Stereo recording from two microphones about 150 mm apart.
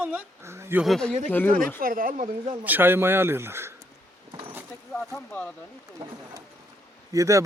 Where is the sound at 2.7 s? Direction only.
15° right (ahead or behind).